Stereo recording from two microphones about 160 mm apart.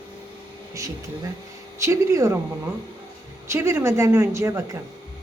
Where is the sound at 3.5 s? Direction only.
15° right (ahead or behind).